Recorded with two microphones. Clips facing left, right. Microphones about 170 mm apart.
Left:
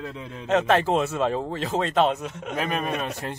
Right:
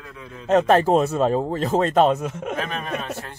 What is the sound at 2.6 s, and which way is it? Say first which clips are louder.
Speech: left 2 dB; 15° left (ahead or behind).